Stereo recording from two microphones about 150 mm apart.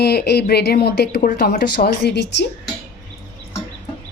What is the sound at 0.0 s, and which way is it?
Speech, 90° left.